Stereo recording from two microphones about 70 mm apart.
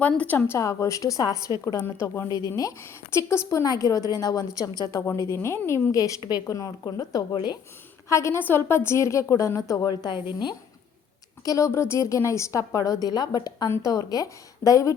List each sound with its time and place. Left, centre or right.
0.2 s a woman's voice: left
1.8 s a woman's voice: left
2.3 s a woman's voice: left
3.1 s a woman's voice: left
3.6 s a woman's voice: left
5.0 s a woman's voice: left
8.1 s a woman's voice: left
8.4 s a woman's voice: left
11.4 s a woman's voice: left
13.7 s a woman's voice: left